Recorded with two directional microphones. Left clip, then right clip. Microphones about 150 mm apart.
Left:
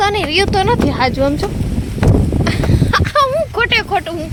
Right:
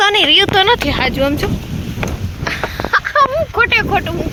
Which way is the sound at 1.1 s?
25° left (ahead or behind).